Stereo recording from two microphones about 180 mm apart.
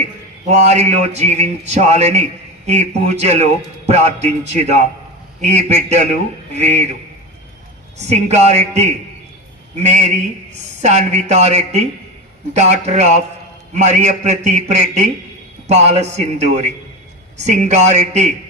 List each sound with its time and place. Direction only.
0.5 s a man's voice: 35° right (ahead or behind)
7.9 s a man's voice: 40° right (ahead or behind)